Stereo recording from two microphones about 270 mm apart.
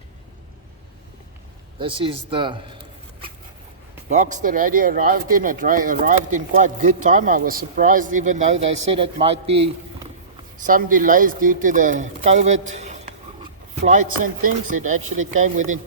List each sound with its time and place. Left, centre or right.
1.8 s speech: centre
4.1 s speech: right